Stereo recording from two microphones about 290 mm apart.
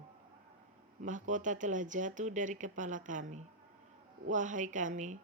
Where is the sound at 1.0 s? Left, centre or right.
Right.